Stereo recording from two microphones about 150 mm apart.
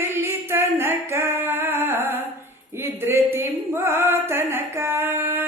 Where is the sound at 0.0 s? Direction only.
15° right (ahead or behind).